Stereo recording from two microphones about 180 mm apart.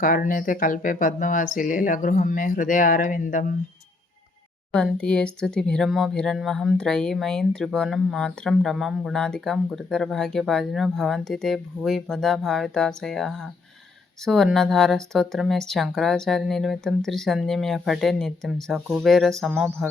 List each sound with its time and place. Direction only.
0.0 s speech: 50° left (ahead or behind)
4.7 s speech: 5° left (ahead or behind)